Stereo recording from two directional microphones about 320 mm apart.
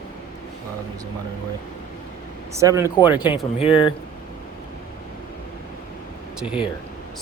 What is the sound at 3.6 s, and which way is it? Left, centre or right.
Speech, centre.